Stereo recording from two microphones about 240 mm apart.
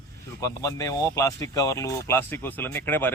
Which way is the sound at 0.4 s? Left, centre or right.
Centre.